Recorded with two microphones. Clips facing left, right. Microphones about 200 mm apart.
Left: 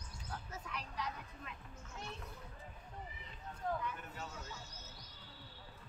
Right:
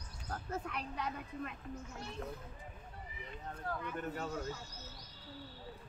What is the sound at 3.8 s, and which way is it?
Speech, 55° right (ahead or behind).